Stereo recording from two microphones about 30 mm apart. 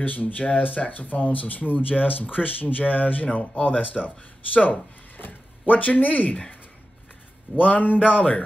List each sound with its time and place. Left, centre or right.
0.0 s speech: left
5.1 s speech: left
7.5 s speech: left